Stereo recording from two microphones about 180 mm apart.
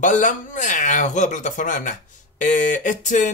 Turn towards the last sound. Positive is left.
turn(degrees=45)  # may be behind; listen again after turning